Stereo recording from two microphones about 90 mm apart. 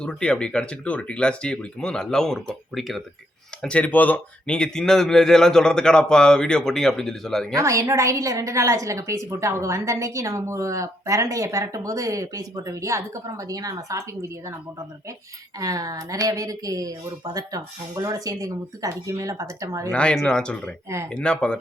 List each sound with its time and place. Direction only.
0.0 s speech: 10° left (ahead or behind)
3.6 s speech: 15° left (ahead or behind)
7.5 s a woman's voice: 35° right (ahead or behind)
15.5 s a woman's voice: 40° right (ahead or behind)
19.9 s speech: 10° left (ahead or behind)